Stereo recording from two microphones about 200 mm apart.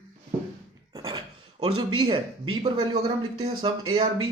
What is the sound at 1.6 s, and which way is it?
Speech, 90° right.